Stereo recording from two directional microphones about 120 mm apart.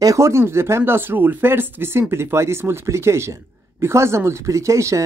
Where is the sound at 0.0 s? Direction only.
25° right (ahead or behind).